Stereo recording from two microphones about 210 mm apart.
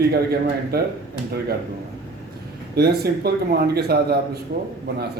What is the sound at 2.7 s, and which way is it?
Speech, 50° right (ahead or behind).